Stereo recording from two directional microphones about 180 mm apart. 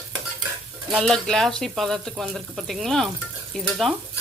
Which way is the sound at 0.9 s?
Centre (ahead or behind).